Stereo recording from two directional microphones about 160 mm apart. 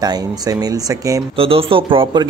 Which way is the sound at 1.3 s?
35° right (ahead or behind).